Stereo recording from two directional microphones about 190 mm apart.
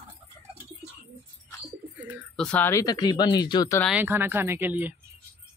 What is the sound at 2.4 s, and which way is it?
Speech, 5° left (ahead or behind).